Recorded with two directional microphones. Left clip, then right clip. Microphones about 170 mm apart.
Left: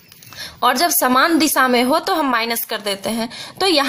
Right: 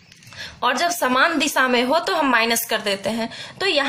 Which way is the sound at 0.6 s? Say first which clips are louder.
Left 4 dB; 40° left (ahead or behind).